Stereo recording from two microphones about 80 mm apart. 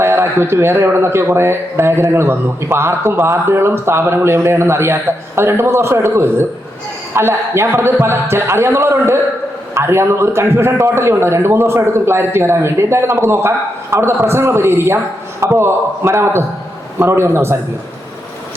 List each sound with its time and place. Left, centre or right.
0.0 s speech: right